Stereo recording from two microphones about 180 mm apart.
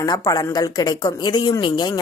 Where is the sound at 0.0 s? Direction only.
20° left (ahead or behind).